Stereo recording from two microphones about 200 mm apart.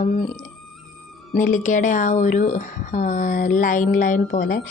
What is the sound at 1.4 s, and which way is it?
A woman's voice, 40° left (ahead or behind).